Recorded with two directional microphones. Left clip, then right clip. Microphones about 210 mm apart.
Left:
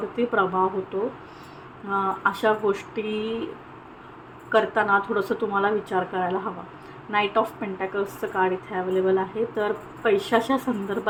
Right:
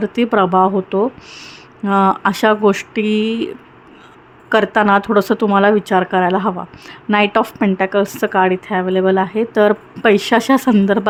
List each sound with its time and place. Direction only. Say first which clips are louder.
0.2 s a woman's voice: right 9 dB; 50° right (ahead or behind)
4.5 s a woman's voice: right 8 dB; 50° right (ahead or behind)